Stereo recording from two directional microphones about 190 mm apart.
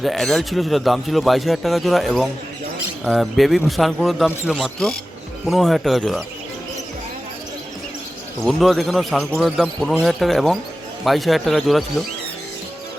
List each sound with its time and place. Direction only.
0.0 s a man's voice: centre (ahead or behind)
8.4 s a man's voice: centre (ahead or behind)